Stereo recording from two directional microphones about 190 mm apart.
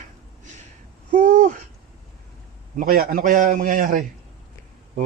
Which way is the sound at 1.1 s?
45° right (ahead or behind).